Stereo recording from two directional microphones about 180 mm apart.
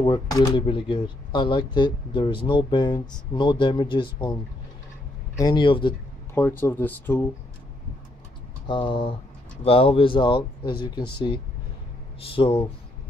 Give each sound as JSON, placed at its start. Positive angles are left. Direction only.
{"t": 0.0, "sound": "speech", "side_deg": 25}
{"t": 5.4, "sound": "speech", "side_deg": 25}
{"t": 6.3, "sound": "speech", "side_deg": 10}
{"t": 8.6, "sound": "speech", "side_deg": 25}
{"t": 12.3, "sound": "speech", "side_deg": 30}